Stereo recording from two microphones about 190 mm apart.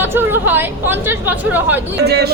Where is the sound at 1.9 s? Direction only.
60° right (ahead or behind).